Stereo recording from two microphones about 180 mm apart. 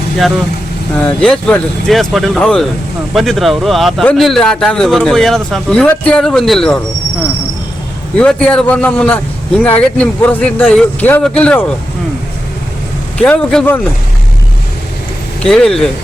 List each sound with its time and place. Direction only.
1.0 s speech: 5° left (ahead or behind)
8.2 s speech: 5° left (ahead or behind)
13.1 s speech: 5° left (ahead or behind)
15.4 s speech: 5° left (ahead or behind)